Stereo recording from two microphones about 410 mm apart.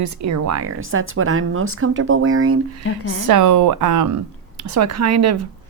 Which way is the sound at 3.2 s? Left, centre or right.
Right.